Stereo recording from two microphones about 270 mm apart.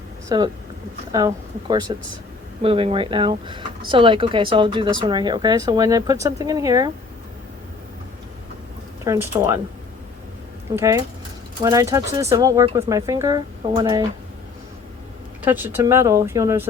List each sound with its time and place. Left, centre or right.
0.3 s speech: centre
9.0 s speech: centre
10.7 s speech: centre
15.4 s speech: centre